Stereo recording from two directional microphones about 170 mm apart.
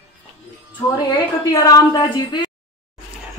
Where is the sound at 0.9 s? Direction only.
20° left (ahead or behind).